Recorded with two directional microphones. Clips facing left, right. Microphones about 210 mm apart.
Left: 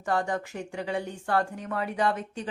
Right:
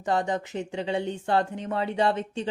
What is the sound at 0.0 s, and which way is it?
Speech, 20° right (ahead or behind).